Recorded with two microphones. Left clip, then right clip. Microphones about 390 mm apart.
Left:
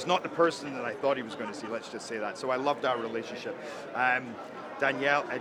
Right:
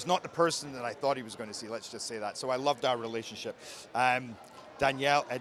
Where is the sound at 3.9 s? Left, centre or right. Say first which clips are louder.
Even; right.